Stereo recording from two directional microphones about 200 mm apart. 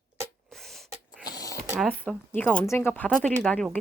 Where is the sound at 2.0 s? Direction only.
5° left (ahead or behind).